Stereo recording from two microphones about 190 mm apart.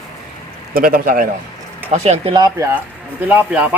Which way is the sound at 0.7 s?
50° right (ahead or behind).